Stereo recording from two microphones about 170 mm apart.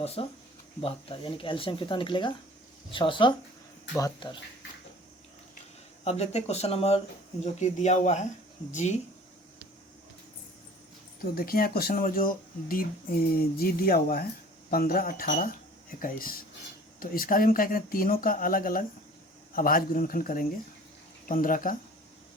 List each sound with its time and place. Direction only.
0.0 s speech: 35° left (ahead or behind)
6.1 s speech: 40° left (ahead or behind)
11.3 s speech: 60° left (ahead or behind)